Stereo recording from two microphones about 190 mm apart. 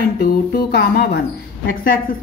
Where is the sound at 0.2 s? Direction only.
55° left (ahead or behind).